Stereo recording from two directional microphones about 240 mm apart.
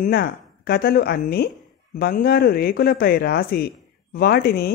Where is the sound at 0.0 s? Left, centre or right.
Left.